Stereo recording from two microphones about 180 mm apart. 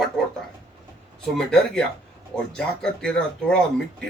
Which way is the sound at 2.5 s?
5° left (ahead or behind).